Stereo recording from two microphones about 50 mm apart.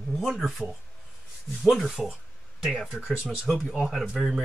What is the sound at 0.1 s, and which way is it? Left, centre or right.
Speech, centre.